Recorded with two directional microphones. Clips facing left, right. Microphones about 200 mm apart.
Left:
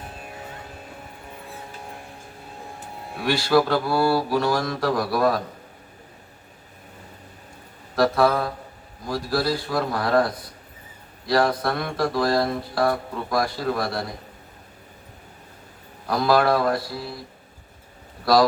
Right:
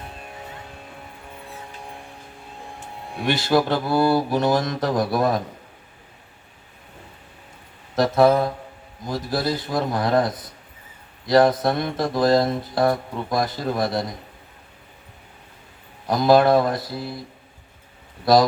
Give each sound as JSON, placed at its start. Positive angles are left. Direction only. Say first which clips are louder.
{"t": 0.1, "sound": "vehicle", "louder": "even", "side_deg": 0}
{"t": 3.2, "sound": "speech", "louder": "even", "side_deg": -20}
{"t": 7.9, "sound": "speech", "louder": "right 3 dB", "side_deg": -20}
{"t": 16.0, "sound": "speech", "louder": "right 4 dB", "side_deg": -20}